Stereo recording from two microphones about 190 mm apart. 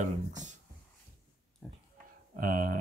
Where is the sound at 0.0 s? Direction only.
40° right (ahead or behind).